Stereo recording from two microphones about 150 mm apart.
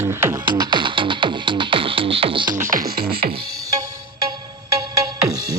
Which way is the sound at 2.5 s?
65° right (ahead or behind).